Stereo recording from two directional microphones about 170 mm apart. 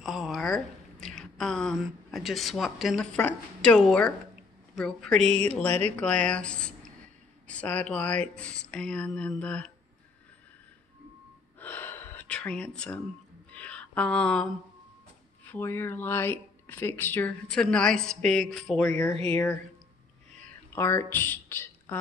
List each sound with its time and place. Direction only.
0.0 s a sound: centre (ahead or behind)
3.2 s a woman's voice: 5° left (ahead or behind)
5.7 s speech: 40° right (ahead or behind)
5.9 s speech: 5° left (ahead or behind)
11.6 s gasp: 10° left (ahead or behind)
13.5 s a sound: 5° left (ahead or behind)
15.4 s speech: 10° left (ahead or behind)
18.9 s speech: 15° left (ahead or behind)
20.3 s a sound: 5° left (ahead or behind)
20.8 s speech: 15° left (ahead or behind)